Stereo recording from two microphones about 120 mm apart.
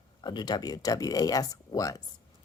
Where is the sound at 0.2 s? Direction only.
35° left (ahead or behind).